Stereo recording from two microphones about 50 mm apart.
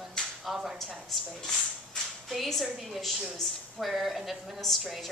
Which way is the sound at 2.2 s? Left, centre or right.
Centre.